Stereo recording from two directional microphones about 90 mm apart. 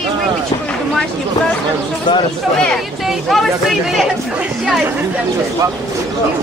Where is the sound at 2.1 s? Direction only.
55° left (ahead or behind).